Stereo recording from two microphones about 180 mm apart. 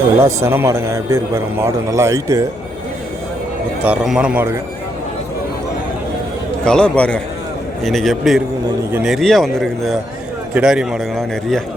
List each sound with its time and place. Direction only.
0.2 s a man's voice: 15° right (ahead or behind)
3.8 s a man's voice: 5° right (ahead or behind)
6.7 s speech: 5° left (ahead or behind)